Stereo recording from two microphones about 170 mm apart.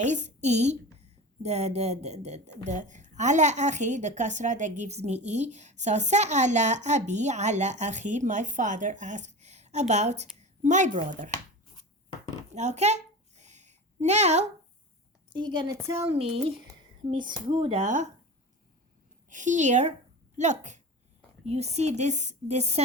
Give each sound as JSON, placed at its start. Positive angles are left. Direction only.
{"t": 0.0, "sound": "a woman's voice", "side_deg": -45}
{"t": 12.5, "sound": "a sound", "side_deg": -40}
{"t": 15.3, "sound": "a woman's voice", "side_deg": -25}
{"t": 16.0, "sound": "speech", "side_deg": -35}
{"t": 17.5, "sound": "speech", "side_deg": -30}
{"t": 17.8, "sound": "a woman's voice", "side_deg": -45}
{"t": 19.3, "sound": "a woman's voice", "side_deg": -45}